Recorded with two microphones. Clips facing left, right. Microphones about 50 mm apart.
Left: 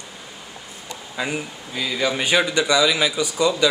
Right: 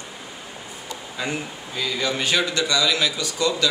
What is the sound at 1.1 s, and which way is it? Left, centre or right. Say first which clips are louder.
Speech: left 2 dB; centre.